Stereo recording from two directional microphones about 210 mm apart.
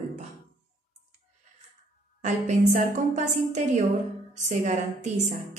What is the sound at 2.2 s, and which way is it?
A woman's voice, 35° right (ahead or behind).